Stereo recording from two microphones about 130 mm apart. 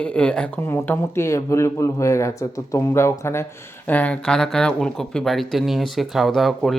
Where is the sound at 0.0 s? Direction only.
10° left (ahead or behind).